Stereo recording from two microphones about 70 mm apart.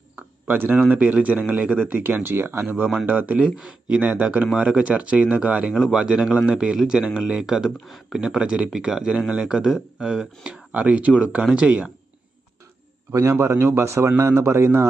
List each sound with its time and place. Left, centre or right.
0.2 s a sound: right
0.9 s speech: right
5.7 s speech: centre
13.4 s a man's voice: right